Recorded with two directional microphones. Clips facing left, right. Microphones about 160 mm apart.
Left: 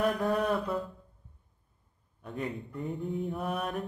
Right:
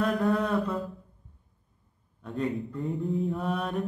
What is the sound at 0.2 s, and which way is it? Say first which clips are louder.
Mantra: right 2 dB; 20° left (ahead or behind).